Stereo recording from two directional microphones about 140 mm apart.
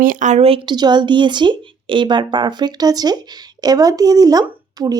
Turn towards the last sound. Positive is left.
turn(degrees=-25)  # may be behind; listen again after turning